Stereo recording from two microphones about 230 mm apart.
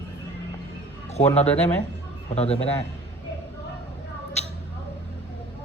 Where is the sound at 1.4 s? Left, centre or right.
Centre.